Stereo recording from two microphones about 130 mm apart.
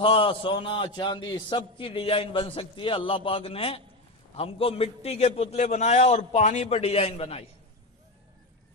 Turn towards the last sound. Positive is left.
turn(degrees=50)  # may be behind; listen again after turning